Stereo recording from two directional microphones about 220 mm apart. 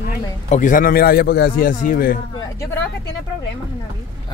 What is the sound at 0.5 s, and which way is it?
A man's voice, 35° left (ahead or behind).